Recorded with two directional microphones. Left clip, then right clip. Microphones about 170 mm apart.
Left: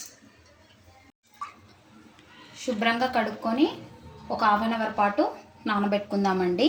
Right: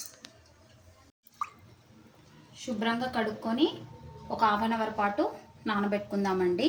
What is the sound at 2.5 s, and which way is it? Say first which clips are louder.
A woman's voice: left 6 dB; 30° left (ahead or behind).